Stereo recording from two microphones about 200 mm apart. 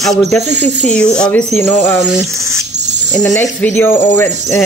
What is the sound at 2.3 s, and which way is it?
Speech, 15° right (ahead or behind).